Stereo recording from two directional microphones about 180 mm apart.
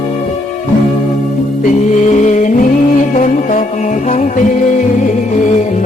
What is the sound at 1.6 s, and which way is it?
Music, 40° left (ahead or behind).